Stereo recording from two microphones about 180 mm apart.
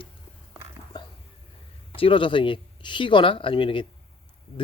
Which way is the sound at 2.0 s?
30° left (ahead or behind).